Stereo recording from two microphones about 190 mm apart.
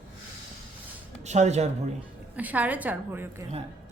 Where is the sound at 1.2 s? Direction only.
35° right (ahead or behind).